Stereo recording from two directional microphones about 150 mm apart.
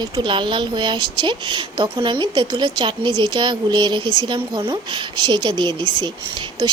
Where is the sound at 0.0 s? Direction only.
35° right (ahead or behind).